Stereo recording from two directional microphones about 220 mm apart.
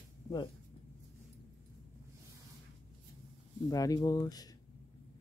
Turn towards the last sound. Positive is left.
turn(degrees=15)  # may be behind; listen again after turning